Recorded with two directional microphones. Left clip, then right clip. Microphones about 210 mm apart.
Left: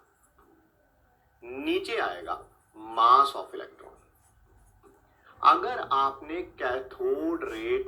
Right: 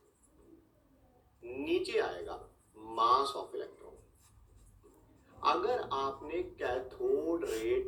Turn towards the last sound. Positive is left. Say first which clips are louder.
# left 3 dB
turn(degrees=30)  # may be behind; listen again after turning